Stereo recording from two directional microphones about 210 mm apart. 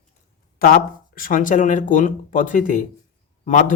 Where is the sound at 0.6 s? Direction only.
45° left (ahead or behind).